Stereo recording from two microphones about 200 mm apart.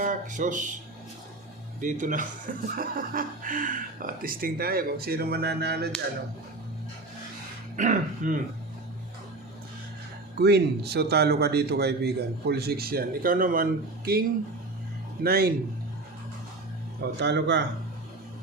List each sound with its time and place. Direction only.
0.0 s speech: 40° right (ahead or behind)
1.8 s speech: 40° right (ahead or behind)
7.8 s speech: 40° right (ahead or behind)
10.3 s speech: 55° right (ahead or behind)
15.2 s speech: 50° right (ahead or behind)
17.2 s speech: 60° right (ahead or behind)